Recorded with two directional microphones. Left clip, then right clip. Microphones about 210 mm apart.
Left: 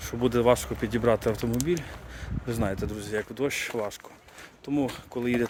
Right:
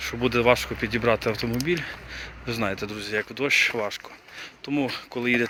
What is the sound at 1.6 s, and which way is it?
Speech, 10° left (ahead or behind).